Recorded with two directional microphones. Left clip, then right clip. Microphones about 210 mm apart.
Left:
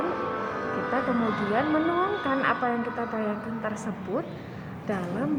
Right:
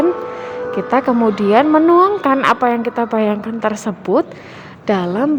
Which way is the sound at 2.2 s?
50° right (ahead or behind).